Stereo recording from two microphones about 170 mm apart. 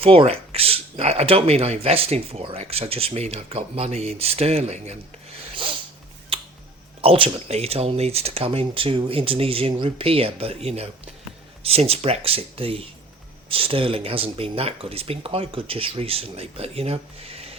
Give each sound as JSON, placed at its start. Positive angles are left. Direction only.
{"t": 0.0, "sound": "speech", "side_deg": -35}
{"t": 7.0, "sound": "speech", "side_deg": -35}